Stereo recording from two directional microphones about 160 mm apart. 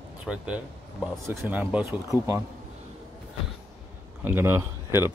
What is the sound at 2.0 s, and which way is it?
Speech, 20° right (ahead or behind).